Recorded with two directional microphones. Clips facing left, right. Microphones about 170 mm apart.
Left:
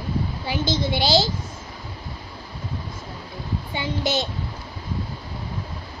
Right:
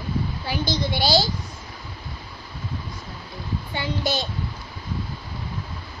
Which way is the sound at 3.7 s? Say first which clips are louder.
Left 1 dB; 20° left (ahead or behind).